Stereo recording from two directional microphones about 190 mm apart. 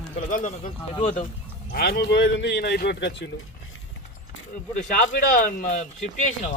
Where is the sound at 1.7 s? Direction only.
55° left (ahead or behind).